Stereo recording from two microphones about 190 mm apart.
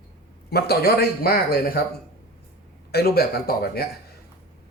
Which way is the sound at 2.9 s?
55° left (ahead or behind).